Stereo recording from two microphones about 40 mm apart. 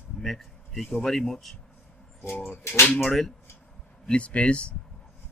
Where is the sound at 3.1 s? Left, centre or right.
Centre.